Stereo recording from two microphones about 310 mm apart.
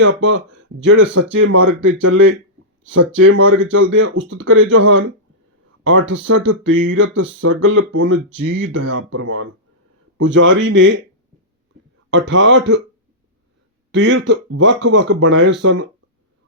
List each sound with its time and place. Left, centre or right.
0.0 s speech: right
12.1 s speech: right
13.9 s speech: right